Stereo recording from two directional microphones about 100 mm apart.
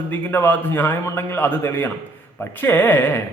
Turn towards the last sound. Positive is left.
turn(degrees=20)  # may be behind; listen again after turning